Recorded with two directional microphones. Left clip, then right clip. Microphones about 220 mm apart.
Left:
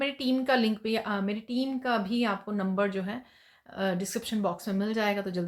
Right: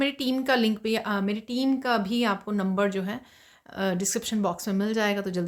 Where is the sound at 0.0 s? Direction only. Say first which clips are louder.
Right 2 dB; 35° right (ahead or behind).